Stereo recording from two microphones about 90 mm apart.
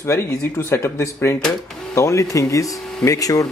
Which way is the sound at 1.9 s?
35° left (ahead or behind).